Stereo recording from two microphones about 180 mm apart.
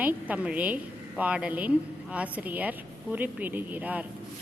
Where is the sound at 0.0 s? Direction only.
10° right (ahead or behind).